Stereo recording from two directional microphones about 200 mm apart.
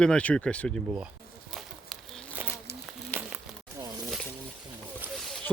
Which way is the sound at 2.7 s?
55° left (ahead or behind).